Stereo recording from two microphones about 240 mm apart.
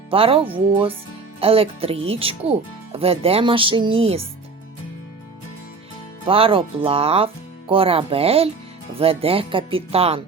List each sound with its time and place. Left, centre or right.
0.1 s speech: right
6.2 s speech: right